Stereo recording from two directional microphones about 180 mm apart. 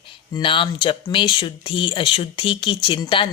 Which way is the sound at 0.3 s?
30° left (ahead or behind).